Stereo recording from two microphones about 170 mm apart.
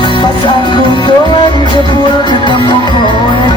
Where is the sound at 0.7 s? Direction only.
25° left (ahead or behind).